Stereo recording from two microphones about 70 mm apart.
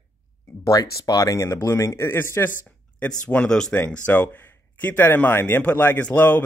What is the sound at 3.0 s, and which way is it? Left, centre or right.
Speech, centre.